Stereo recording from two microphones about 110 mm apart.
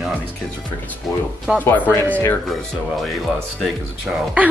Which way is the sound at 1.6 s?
15° left (ahead or behind).